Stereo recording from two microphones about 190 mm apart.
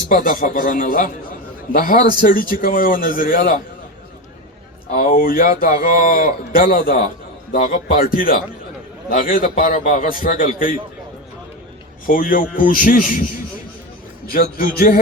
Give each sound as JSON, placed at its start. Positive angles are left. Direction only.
{"t": 0.1, "sound": "a man's voice", "side_deg": 45}
{"t": 4.9, "sound": "a man's voice", "side_deg": 50}
{"t": 12.0, "sound": "a man's voice", "side_deg": 45}
{"t": 14.3, "sound": "a man's voice", "side_deg": 50}